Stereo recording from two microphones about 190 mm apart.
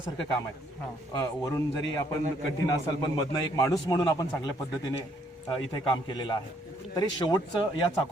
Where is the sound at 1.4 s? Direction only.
15° left (ahead or behind).